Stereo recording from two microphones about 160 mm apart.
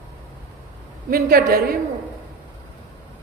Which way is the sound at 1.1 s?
70° right (ahead or behind).